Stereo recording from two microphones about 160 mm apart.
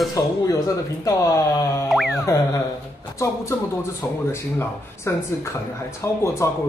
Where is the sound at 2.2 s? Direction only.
20° left (ahead or behind).